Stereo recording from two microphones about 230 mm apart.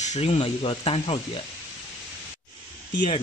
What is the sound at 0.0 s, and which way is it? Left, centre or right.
Speech, left.